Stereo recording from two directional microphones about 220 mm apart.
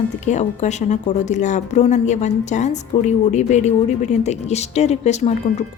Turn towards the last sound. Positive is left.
turn(degrees=30)  # may be behind; listen again after turning